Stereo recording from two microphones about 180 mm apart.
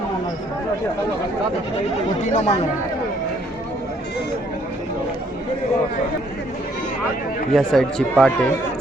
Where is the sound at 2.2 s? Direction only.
40° left (ahead or behind).